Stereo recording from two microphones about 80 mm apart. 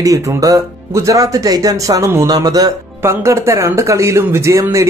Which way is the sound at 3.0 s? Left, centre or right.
Right.